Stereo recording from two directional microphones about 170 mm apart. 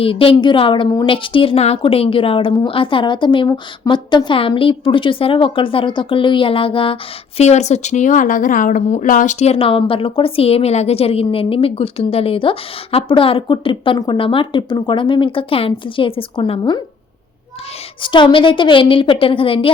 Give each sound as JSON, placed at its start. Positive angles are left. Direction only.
{"t": 0.0, "sound": "a woman's voice", "side_deg": 35}
{"t": 18.0, "sound": "a woman's voice", "side_deg": 30}